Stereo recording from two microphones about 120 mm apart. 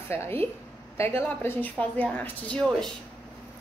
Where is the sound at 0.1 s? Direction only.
20° left (ahead or behind).